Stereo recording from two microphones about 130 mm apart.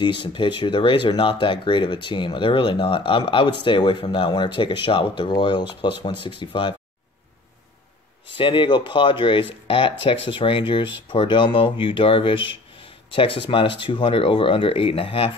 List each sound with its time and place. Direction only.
0.0 s speech: 40° left (ahead or behind)
8.4 s speech: 40° left (ahead or behind)